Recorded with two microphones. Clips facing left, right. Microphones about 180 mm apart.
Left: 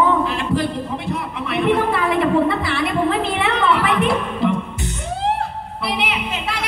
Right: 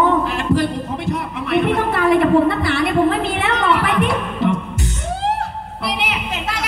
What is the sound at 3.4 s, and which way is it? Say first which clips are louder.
Music: even; 40° right (ahead or behind).